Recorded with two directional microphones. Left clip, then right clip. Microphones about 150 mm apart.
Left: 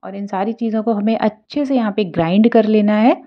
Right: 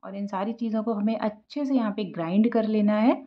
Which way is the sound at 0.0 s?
30° left (ahead or behind).